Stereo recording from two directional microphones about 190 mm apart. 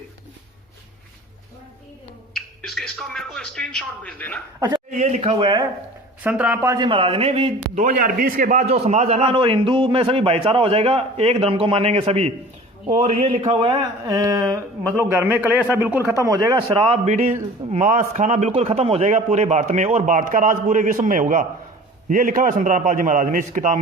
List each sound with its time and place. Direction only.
2.3 s a sound: 5° left (ahead or behind)
4.9 s a man's voice: 40° right (ahead or behind)
6.2 s speech: 10° right (ahead or behind); by 7.9 s 30° right (ahead or behind)
7.9 s a man's voice: 45° right (ahead or behind)